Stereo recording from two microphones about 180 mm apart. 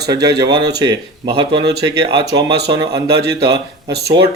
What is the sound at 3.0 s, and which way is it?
Speech, 65° right (ahead or behind).